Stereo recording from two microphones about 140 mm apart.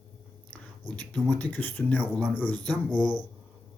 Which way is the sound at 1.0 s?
10° left (ahead or behind).